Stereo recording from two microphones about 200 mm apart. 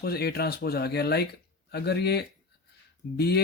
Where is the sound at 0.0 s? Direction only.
50° left (ahead or behind).